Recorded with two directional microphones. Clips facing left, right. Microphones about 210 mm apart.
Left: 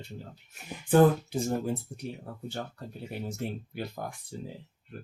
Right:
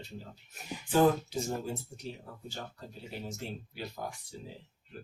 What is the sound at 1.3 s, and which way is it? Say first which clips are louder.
Speech: left 5 dB; 55° left (ahead or behind).